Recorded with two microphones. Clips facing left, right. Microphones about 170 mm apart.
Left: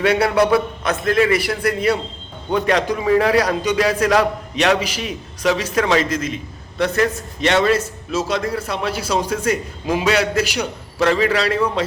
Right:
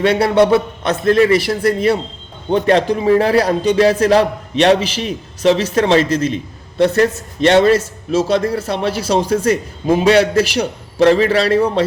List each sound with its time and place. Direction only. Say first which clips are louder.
0.0 s a man's voice: right 4 dB; 30° right (ahead or behind)